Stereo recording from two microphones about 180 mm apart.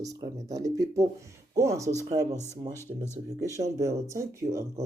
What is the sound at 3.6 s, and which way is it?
Speech, 15° right (ahead or behind).